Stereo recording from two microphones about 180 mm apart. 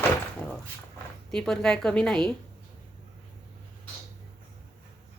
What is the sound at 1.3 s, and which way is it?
A woman's voice, 5° left (ahead or behind).